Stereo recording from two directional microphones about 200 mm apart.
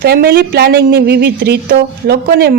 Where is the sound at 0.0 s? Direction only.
50° right (ahead or behind).